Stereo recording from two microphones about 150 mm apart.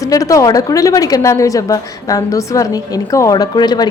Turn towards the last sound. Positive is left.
turn(degrees=30)  # may be behind; listen again after turning